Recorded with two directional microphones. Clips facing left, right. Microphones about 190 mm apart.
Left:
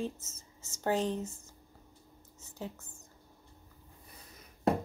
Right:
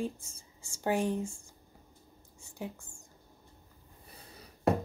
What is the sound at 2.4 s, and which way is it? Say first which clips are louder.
Whispering: right 1 dB; 15° right (ahead or behind).